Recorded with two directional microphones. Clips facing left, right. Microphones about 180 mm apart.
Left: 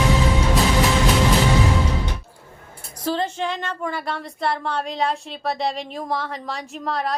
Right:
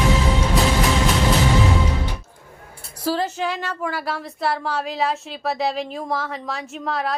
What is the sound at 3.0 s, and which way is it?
Speech, 5° right (ahead or behind).